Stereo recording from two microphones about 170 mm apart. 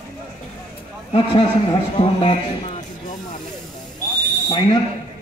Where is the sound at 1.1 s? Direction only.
30° left (ahead or behind).